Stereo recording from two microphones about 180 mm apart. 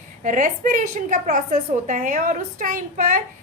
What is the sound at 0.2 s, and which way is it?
A woman's voice, 45° right (ahead or behind).